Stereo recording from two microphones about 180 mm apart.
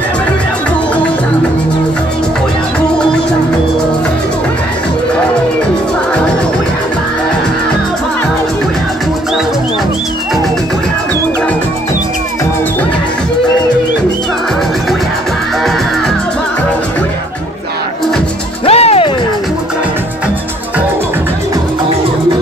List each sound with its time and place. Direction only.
18.7 s music: 35° left (ahead or behind)